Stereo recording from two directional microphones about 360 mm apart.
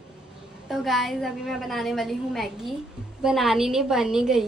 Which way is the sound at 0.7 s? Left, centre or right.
Centre.